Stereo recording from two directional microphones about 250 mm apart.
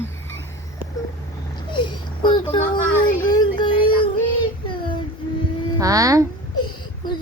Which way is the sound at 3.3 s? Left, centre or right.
Centre.